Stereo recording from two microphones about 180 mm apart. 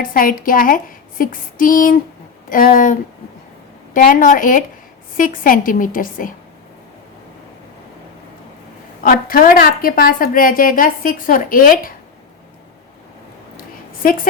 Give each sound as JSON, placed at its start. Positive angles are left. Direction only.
{"t": 0.0, "sound": "a woman's voice", "side_deg": 50}
{"t": 9.0, "sound": "a woman's voice", "side_deg": 50}
{"t": 14.0, "sound": "a woman's voice", "side_deg": 50}